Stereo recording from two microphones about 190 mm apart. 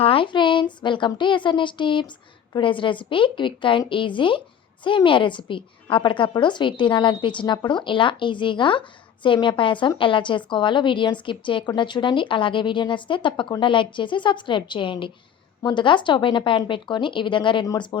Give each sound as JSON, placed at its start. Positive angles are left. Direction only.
{"t": 0.0, "sound": "a woman's voice", "side_deg": 30}